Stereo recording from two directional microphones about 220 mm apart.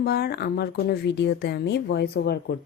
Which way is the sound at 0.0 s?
45° left (ahead or behind).